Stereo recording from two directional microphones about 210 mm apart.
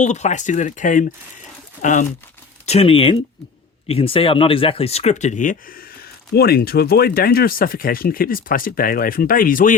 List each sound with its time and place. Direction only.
0.0 s speech: 35° left (ahead or behind)